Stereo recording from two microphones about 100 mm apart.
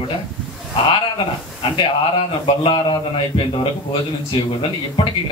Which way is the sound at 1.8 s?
55° left (ahead or behind).